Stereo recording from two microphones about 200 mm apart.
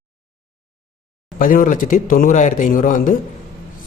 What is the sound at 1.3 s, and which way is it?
Speech, 40° left (ahead or behind).